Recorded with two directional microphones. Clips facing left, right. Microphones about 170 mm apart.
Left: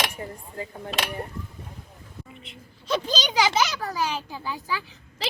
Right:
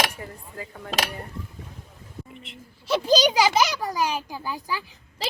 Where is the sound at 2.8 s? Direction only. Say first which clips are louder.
Right 7 dB; 10° right (ahead or behind).